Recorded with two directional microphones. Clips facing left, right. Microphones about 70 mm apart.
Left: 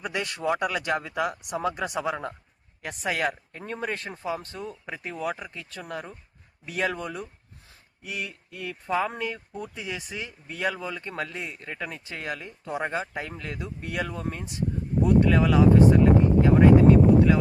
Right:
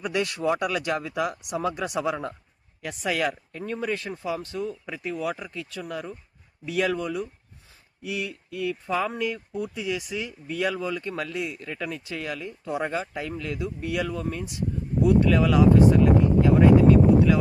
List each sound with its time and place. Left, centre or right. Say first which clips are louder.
0.0 s speech: right 3 dB; left